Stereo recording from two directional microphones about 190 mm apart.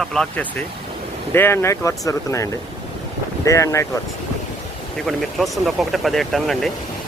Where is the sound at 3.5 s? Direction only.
15° left (ahead or behind).